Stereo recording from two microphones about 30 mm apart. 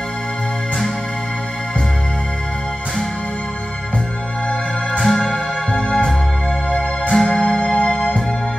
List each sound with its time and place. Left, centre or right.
5.0 s music: centre
5.8 s music: left